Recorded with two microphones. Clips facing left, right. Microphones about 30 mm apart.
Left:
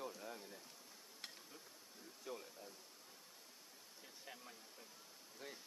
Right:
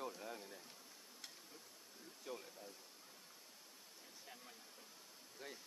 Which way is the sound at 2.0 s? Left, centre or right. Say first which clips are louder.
Even; centre.